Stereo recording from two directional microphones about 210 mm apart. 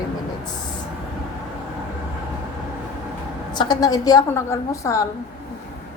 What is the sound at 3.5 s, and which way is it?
A woman's voice, 20° left (ahead or behind).